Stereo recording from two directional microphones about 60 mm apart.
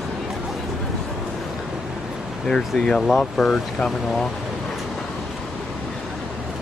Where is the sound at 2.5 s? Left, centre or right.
Centre.